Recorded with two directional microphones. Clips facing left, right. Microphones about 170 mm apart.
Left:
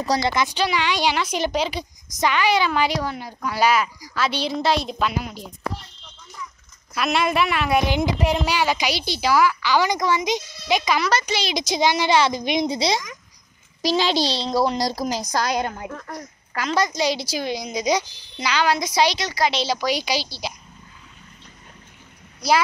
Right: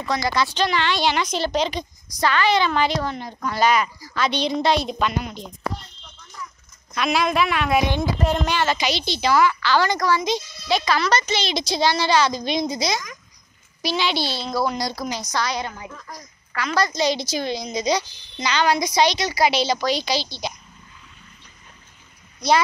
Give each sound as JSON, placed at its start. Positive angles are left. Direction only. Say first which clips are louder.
{"t": 0.2, "sound": "a woman's voice", "louder": "even", "side_deg": 20}
{"t": 6.9, "sound": "a woman's voice", "louder": "even", "side_deg": 0}
{"t": 7.9, "sound": "a woman's voice", "louder": "left 1 dB", "side_deg": 15}
{"t": 13.8, "sound": "a woman's voice", "louder": "left 3 dB", "side_deg": 40}
{"t": 16.7, "sound": "a woman's voice", "louder": "even", "side_deg": 15}
{"t": 19.8, "sound": "a woman's voice", "louder": "right 1 dB", "side_deg": 10}